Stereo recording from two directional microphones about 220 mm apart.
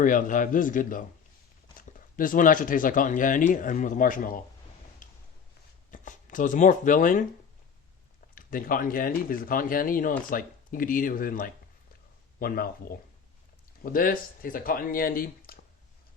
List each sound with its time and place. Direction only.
0.0 s speech: 35° left (ahead or behind)
5.0 s a sound: 35° left (ahead or behind)
5.9 s speech: 35° left (ahead or behind)
8.4 s speech: 40° left (ahead or behind)